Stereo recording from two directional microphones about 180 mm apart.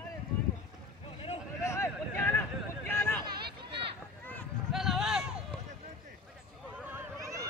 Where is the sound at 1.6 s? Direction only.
15° left (ahead or behind).